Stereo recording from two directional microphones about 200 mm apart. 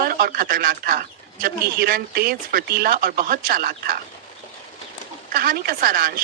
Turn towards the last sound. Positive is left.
turn(degrees=-45)  # may be behind; listen again after turning